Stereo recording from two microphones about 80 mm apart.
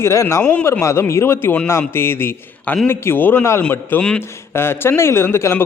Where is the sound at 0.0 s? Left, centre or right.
Left.